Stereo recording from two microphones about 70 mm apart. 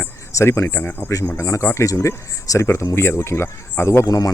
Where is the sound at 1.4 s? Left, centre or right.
Left.